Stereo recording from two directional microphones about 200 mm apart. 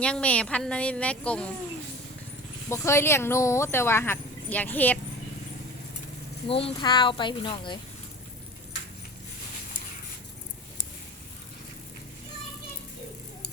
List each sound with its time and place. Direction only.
0.0 s speech: 5° left (ahead or behind)
2.6 s speech: 15° left (ahead or behind)
6.5 s speech: 30° left (ahead or behind)